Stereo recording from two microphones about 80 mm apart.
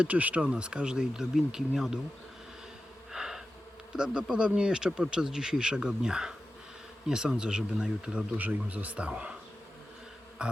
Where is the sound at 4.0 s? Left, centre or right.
Centre.